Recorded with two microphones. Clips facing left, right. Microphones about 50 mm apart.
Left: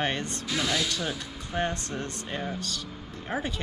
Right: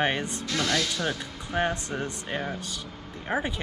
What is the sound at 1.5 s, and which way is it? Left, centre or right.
Speech, centre.